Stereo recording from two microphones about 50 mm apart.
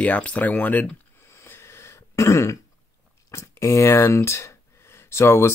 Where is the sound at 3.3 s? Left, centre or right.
Left.